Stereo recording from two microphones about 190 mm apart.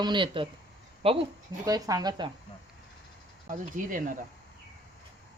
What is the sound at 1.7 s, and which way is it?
Speech, 20° right (ahead or behind).